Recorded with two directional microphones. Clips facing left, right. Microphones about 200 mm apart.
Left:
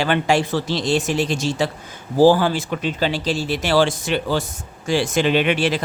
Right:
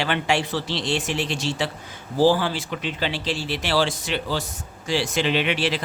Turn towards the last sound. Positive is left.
turn(degrees=45)  # may be behind; listen again after turning